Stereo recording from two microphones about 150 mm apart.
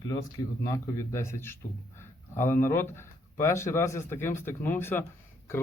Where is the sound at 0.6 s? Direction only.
20° left (ahead or behind).